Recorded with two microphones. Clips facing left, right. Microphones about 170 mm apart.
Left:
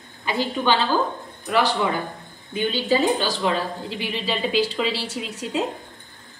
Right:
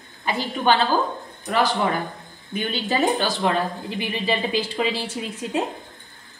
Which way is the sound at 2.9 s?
55° right (ahead or behind).